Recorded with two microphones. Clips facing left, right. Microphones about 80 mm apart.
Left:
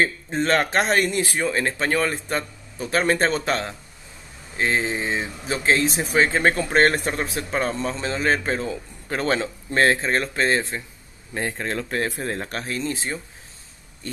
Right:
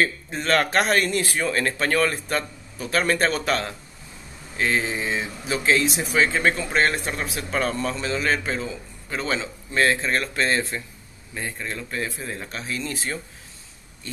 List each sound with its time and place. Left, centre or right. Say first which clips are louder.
0.0 s speech: left 2 dB; left
8.6 s speech: left 4 dB; left
11.3 s speech: left 5 dB; left
12.7 s speech: left 1 dB; left